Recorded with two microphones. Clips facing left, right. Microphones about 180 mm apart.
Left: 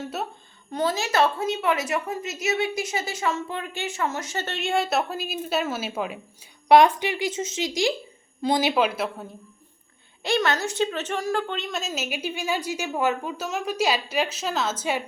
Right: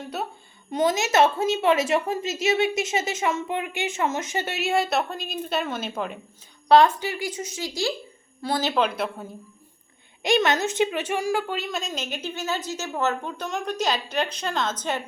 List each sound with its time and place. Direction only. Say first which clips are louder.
0.7 s a woman's voice: right 3 dB; 15° right (ahead or behind); by 6.1 s 5° left (ahead or behind)
6.7 s speech: left 1 dB; 15° left (ahead or behind)
10.2 s a woman's voice: right 2 dB; 20° right (ahead or behind); by 15.0 s 10° left (ahead or behind)